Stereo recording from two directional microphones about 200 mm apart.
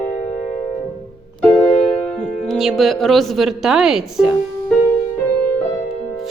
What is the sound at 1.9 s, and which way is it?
Speech, 5° left (ahead or behind).